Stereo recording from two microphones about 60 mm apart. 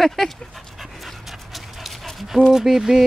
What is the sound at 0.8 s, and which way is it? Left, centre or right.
Dog, centre.